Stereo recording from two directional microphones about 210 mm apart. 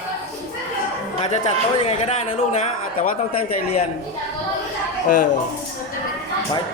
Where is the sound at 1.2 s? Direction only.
25° left (ahead or behind).